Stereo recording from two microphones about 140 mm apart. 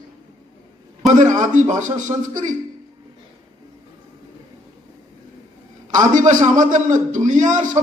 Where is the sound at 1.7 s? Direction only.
65° right (ahead or behind).